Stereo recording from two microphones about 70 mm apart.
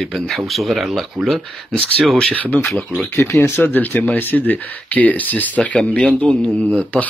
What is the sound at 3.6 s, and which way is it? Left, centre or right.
Speech, left.